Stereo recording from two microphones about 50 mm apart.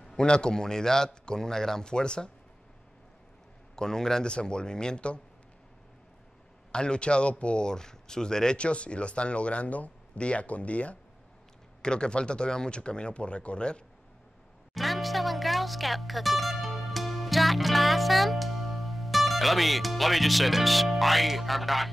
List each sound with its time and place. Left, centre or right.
0.0 s a man's voice: centre
3.7 s a man's voice: centre
6.7 s speech: centre
14.7 s speech: centre